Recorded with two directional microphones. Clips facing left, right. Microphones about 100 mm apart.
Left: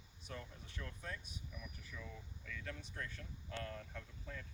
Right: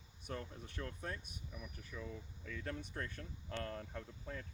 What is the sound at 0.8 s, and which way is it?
Speech, 35° right (ahead or behind).